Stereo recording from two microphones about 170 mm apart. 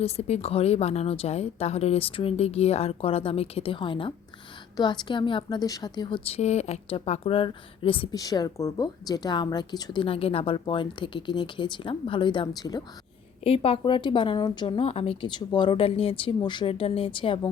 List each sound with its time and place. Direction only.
0.0 s a woman's voice: 35° left (ahead or behind)
13.4 s a woman's voice: 35° left (ahead or behind)